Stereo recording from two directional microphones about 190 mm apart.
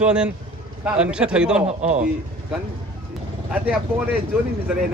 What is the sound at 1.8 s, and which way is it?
Speech, 40° right (ahead or behind).